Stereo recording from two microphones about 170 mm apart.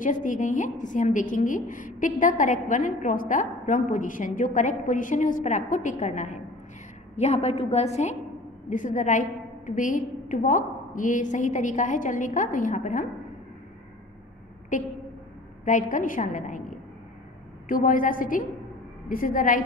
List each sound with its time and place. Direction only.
0.0 s a woman's voice: 50° left (ahead or behind)
15.6 s a woman's voice: 50° left (ahead or behind)